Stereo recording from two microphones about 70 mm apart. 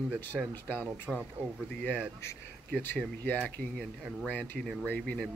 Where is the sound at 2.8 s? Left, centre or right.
Left.